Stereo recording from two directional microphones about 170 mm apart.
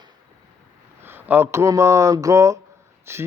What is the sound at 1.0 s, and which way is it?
Speech, 10° right (ahead or behind).